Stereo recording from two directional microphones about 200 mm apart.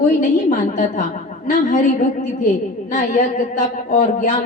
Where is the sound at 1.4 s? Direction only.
40° left (ahead or behind).